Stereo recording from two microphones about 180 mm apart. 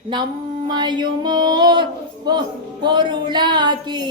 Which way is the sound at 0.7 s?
25° right (ahead or behind).